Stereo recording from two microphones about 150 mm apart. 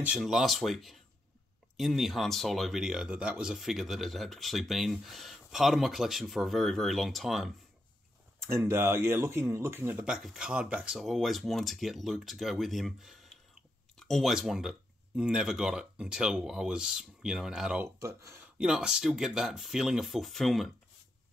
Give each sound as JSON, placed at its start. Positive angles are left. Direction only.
{"t": 0.0, "sound": "speech", "side_deg": -5}
{"t": 8.5, "sound": "speech", "side_deg": -15}
{"t": 17.8, "sound": "speech", "side_deg": -20}
{"t": 18.6, "sound": "speech", "side_deg": -5}